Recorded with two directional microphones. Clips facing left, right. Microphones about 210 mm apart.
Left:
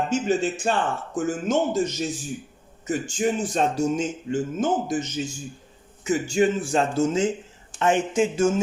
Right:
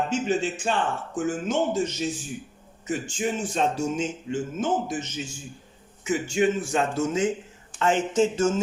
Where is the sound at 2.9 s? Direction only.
40° left (ahead or behind).